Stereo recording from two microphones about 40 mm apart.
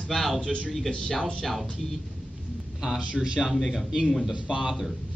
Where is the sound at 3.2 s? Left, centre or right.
Centre.